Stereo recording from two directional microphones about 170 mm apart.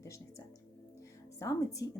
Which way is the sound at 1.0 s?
20° left (ahead or behind).